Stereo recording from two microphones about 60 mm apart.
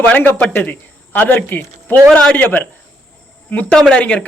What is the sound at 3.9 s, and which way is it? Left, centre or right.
Speech, centre.